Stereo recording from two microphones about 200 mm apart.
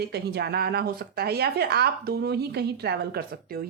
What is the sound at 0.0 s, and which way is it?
A woman's voice, 55° right (ahead or behind).